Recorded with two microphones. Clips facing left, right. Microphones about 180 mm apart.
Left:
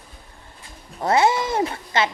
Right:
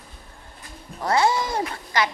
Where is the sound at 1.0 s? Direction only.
20° left (ahead or behind).